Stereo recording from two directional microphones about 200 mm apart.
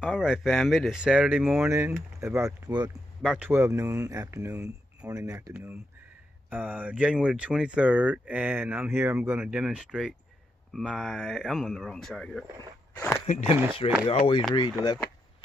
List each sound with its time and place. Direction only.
0.0 s speech: 5° right (ahead or behind)
3.2 s speech: 5° right (ahead or behind)
12.9 s walk: 10° left (ahead or behind)
13.8 s speech: 25° left (ahead or behind)